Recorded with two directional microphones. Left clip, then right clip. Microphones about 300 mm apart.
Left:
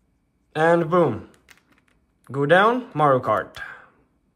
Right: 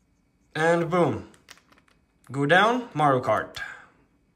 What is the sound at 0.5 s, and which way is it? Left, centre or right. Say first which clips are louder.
Typing: left 4 dB; centre.